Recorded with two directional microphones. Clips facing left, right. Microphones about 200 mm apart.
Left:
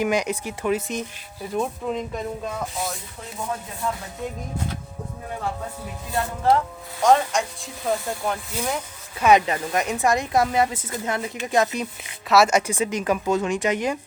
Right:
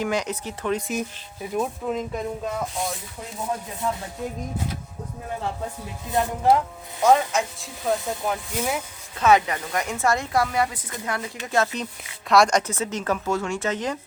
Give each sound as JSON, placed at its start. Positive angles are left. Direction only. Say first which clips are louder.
{"t": 0.0, "sound": "speech", "louder": "left 3 dB", "side_deg": 10}
{"t": 1.5, "sound": "speech", "louder": "even", "side_deg": 0}
{"t": 6.1, "sound": "speech", "louder": "right 1 dB", "side_deg": -15}
{"t": 7.0, "sound": "speech", "louder": "even", "side_deg": -5}
{"t": 9.1, "sound": "a woman's voice", "louder": "left 1 dB", "side_deg": 15}